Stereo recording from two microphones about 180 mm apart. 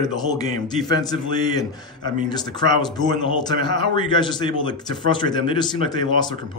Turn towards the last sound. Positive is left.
turn(degrees=25)  # may be behind; listen again after turning